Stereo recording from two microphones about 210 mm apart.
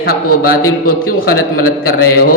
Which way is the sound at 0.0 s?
45° left (ahead or behind).